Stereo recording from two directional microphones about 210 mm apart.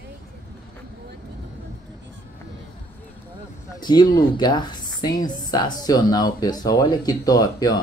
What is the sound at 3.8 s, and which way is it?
Speech, 20° left (ahead or behind).